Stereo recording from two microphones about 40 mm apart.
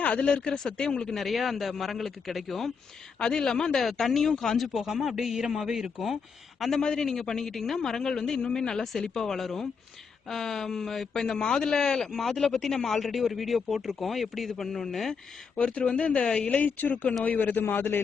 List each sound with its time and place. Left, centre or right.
0.0 s speech: left
0.5 s a man's voice: centre
0.9 s speech: left
1.1 s speech: centre
3.2 s a man's voice: centre
3.8 s a man's voice: centre
6.6 s a man's voice: centre
15.6 s speech: left
16.5 s a woman's voice: left
16.9 s speech: left
17.2 s a woman's voice: left
17.7 s a man's voice: left